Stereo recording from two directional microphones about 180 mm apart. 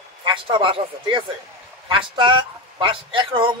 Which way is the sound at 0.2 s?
25° right (ahead or behind).